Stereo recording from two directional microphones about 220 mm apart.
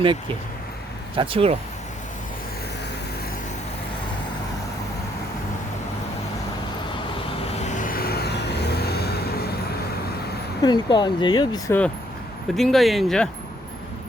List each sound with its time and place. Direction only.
1.1 s speech: 25° right (ahead or behind)
7.6 s vehicle: 35° left (ahead or behind)
10.6 s speech: 20° left (ahead or behind)
12.5 s speech: centre (ahead or behind)